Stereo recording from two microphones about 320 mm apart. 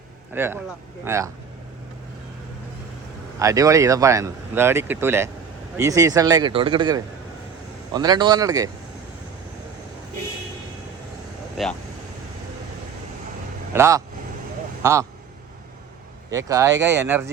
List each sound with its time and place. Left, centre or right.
0.3 s speech: centre
3.3 s speech: centre
11.5 s speech: centre
13.7 s a man's voice: centre
16.3 s speech: centre